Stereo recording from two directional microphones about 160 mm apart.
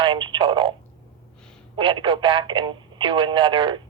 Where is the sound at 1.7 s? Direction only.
30° right (ahead or behind).